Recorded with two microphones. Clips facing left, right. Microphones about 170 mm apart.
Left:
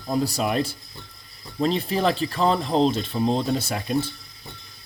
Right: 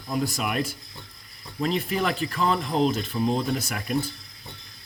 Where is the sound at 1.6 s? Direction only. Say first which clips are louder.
Left 3 dB; 30° left (ahead or behind).